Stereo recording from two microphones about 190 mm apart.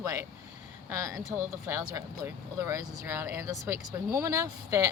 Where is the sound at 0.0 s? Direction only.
15° right (ahead or behind).